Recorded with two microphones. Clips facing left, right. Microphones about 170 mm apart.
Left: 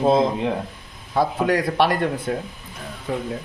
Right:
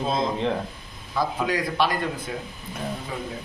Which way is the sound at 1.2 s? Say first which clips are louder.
Left 5 dB; 60° left (ahead or behind).